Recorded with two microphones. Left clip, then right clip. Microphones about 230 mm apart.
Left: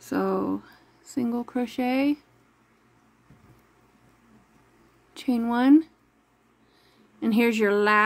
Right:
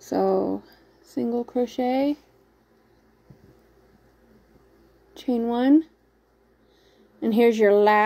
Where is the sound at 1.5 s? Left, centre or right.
Centre.